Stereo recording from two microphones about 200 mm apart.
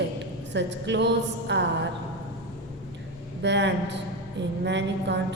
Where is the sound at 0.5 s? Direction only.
60° right (ahead or behind).